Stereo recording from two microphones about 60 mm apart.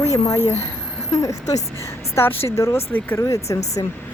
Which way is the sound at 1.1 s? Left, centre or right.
Left.